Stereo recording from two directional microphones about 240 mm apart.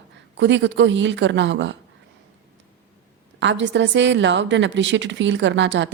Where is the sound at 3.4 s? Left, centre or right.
Right.